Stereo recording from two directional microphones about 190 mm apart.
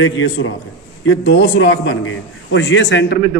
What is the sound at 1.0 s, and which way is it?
A man's voice, 80° left.